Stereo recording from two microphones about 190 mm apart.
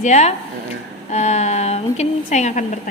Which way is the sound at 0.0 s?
35° left (ahead or behind).